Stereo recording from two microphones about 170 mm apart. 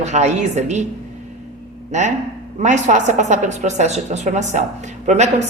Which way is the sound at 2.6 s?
45° right (ahead or behind).